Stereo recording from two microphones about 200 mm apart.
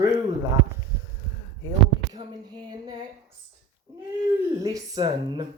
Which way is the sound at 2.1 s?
20° right (ahead or behind).